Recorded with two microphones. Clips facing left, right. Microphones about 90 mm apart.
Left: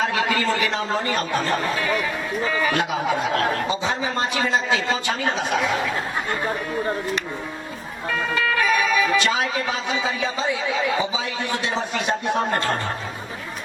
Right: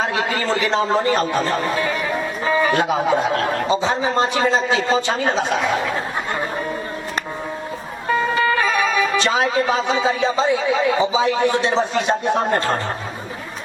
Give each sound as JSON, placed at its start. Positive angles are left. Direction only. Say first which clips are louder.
{"t": 0.0, "sound": "a man's voice", "louder": "even", "side_deg": -25}
{"t": 8.1, "sound": "speech", "louder": "right 5 dB", "side_deg": -40}